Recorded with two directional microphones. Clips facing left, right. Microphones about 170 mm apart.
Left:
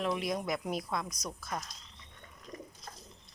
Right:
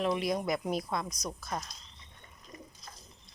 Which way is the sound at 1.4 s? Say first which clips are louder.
Right 1 dB; 25° right (ahead or behind).